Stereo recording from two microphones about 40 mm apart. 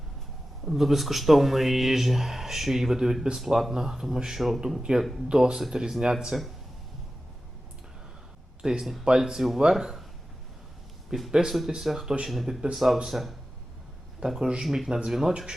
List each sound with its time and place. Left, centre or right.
0.6 s speech: centre
4.9 s speech: centre
8.8 s speech: centre
9.0 s speech: centre
11.1 s speech: centre
14.3 s speech: centre